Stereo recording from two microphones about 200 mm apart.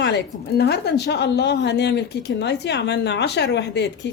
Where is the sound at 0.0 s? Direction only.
55° left (ahead or behind).